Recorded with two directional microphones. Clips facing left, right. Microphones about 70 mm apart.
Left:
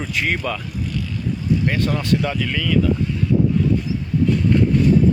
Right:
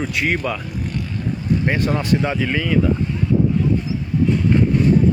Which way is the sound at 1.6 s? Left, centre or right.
Right.